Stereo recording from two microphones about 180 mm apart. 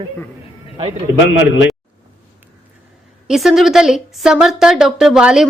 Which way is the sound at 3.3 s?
Centre (ahead or behind).